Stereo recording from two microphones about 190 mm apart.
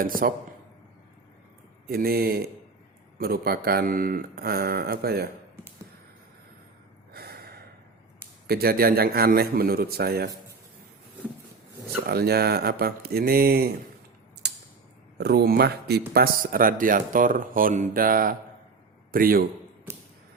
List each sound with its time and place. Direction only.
0.0 s speech: 50° right (ahead or behind)
1.9 s speech: 55° right (ahead or behind)
7.1 s snort: 55° right (ahead or behind)
8.4 s speech: 55° right (ahead or behind)
12.0 s speech: 55° right (ahead or behind)
14.4 s a sound: 55° right (ahead or behind)
15.2 s speech: 55° right (ahead or behind)
19.9 s a sound: 10° right (ahead or behind)